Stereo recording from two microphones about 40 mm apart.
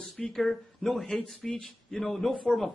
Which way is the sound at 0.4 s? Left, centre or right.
Centre.